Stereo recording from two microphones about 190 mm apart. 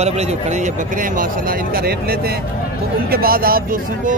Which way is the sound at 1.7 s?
50° right (ahead or behind).